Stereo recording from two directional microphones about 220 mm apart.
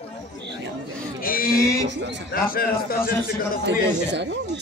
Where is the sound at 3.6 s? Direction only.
50° right (ahead or behind).